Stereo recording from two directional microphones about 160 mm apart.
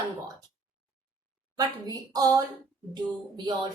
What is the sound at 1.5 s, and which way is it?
Speech, 25° right (ahead or behind).